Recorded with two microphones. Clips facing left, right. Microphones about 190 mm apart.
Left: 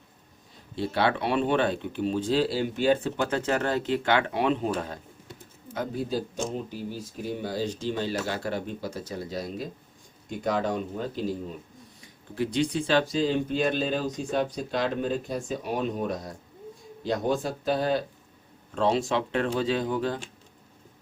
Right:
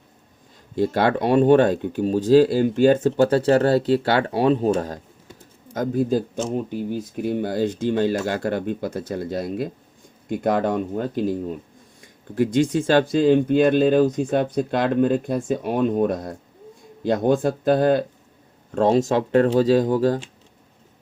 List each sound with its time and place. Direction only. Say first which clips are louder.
0.8 s speech: right 6 dB; 45° right (ahead or behind)
5.7 s speech: right 8 dB; 45° right (ahead or behind)